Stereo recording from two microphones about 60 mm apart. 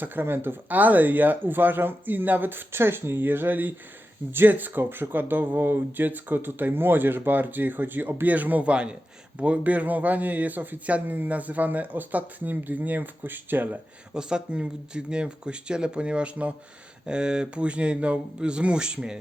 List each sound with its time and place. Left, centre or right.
0.0 s a man's voice: right
14.1 s speech: centre